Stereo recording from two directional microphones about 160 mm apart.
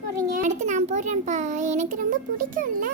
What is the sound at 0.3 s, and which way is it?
A child's voice, 50° right (ahead or behind).